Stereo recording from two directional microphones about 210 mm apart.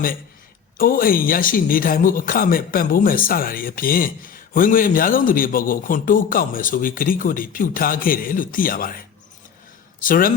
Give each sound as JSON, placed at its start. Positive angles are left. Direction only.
{"t": 0.8, "sound": "a man's voice", "side_deg": 45}